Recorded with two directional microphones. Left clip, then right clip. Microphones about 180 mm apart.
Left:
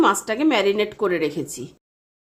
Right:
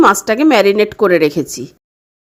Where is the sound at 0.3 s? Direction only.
40° right (ahead or behind).